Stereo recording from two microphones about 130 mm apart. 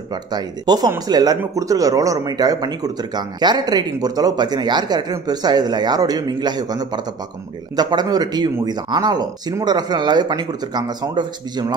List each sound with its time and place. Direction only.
0.3 s speech: 30° right (ahead or behind)